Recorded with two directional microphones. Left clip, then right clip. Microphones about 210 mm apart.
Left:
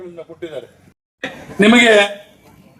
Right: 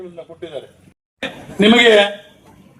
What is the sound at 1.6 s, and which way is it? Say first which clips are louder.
Speech: even; 55° left (ahead or behind).